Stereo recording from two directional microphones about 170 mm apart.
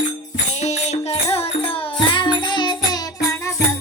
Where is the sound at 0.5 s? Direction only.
40° left (ahead or behind); by 3.6 s 20° left (ahead or behind).